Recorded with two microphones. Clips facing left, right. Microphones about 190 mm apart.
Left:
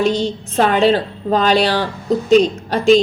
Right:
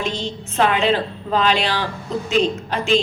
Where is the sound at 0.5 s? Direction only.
40° left (ahead or behind).